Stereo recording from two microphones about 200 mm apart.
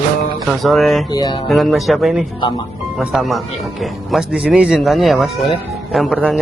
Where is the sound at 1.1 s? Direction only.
20° left (ahead or behind).